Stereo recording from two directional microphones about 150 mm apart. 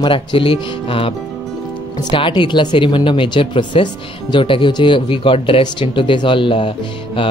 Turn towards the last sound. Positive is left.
turn(degrees=35)  # may be behind; listen again after turning